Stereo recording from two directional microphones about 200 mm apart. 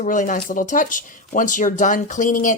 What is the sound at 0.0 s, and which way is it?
Speech, 40° left (ahead or behind).